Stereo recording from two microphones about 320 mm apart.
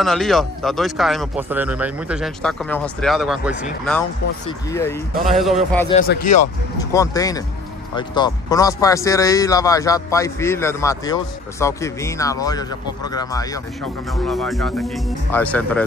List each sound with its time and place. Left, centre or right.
0.0 s speech: centre
5.9 s speech: left
6.2 s speech: left
6.8 s speech: centre
14.1 s speech: centre